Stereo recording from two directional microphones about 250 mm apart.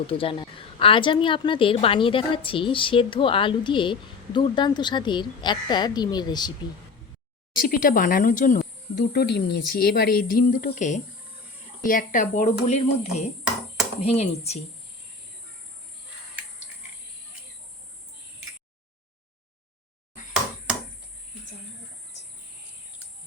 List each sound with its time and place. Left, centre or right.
0.1 s a woman's voice: left
7.6 s a woman's voice: left